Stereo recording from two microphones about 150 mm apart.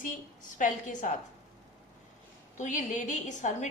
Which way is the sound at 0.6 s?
60° left (ahead or behind).